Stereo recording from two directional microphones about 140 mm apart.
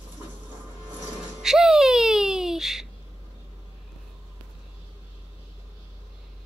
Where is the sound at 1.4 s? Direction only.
Centre (ahead or behind).